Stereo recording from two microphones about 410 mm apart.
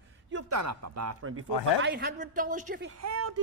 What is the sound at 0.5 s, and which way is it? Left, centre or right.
Speech, right.